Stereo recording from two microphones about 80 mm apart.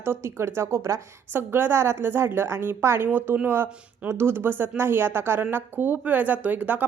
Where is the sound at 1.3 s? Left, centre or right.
Right.